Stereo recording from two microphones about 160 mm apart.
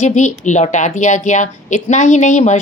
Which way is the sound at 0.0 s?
45° left (ahead or behind).